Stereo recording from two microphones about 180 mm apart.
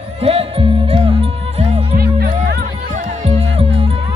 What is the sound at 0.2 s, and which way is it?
Music, 35° right (ahead or behind).